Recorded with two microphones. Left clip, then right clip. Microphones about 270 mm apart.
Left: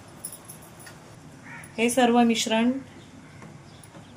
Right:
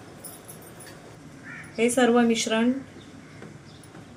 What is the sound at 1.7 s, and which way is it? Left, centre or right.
Speech, left.